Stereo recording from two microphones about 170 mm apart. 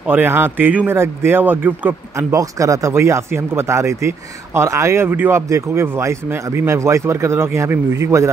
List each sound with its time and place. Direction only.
0.0 s speech: 10° right (ahead or behind)